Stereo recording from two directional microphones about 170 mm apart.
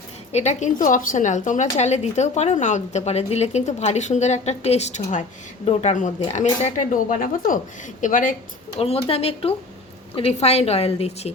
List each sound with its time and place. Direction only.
0.3 s a woman's voice: 45° left (ahead or behind)
8.8 s a woman's voice: 35° left (ahead or behind)